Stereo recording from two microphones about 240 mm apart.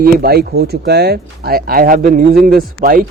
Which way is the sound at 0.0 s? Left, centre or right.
Right.